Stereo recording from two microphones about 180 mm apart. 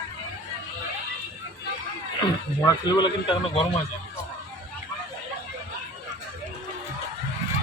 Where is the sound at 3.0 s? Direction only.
25° left (ahead or behind).